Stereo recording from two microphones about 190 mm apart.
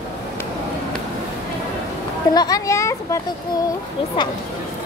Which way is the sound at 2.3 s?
20° left (ahead or behind).